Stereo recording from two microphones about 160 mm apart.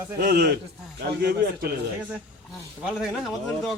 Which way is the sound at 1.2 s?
80° right.